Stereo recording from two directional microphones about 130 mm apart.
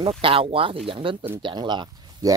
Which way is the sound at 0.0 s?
45° right (ahead or behind).